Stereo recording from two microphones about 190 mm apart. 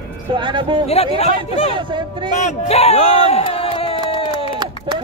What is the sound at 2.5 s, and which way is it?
Speech, 35° left (ahead or behind).